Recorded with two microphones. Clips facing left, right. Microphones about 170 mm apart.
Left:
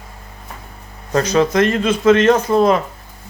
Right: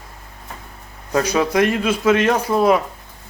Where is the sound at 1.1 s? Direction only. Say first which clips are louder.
Left 3 dB; 10° right (ahead or behind).